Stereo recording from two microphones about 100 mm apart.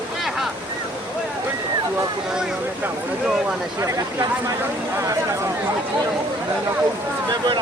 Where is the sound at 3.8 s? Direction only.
35° right (ahead or behind).